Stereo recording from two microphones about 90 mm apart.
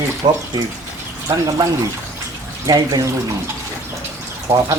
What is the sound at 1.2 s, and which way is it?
Speech, 40° right (ahead or behind).